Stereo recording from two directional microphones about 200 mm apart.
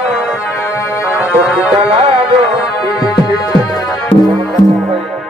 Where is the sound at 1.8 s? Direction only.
30° right (ahead or behind).